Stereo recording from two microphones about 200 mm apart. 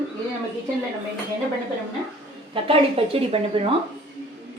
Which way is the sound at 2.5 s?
30° right (ahead or behind).